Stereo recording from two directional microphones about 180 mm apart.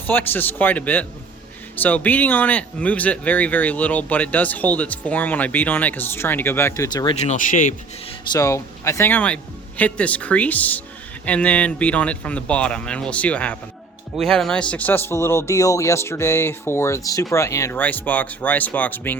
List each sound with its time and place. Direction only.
0.1 s speech: 10° left (ahead or behind)
7.2 s speech: 45° left (ahead or behind)
8.3 s speech: 15° left (ahead or behind)